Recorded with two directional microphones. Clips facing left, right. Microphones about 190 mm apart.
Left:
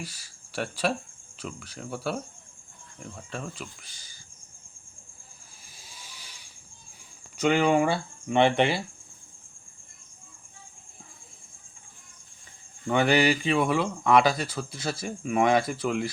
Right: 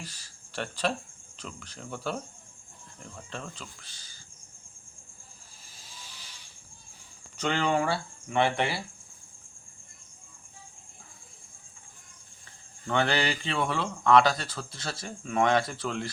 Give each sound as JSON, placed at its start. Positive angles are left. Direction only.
{"t": 0.0, "sound": "speech", "side_deg": 10}
{"t": 6.0, "sound": "mechanisms", "side_deg": 10}
{"t": 7.3, "sound": "speech", "side_deg": 10}
{"t": 12.9, "sound": "speech", "side_deg": 10}